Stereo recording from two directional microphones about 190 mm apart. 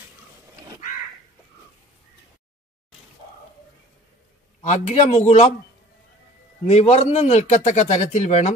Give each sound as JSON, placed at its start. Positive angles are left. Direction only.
{"t": 4.6, "sound": "a man's voice", "side_deg": 40}
{"t": 6.7, "sound": "a man's voice", "side_deg": 35}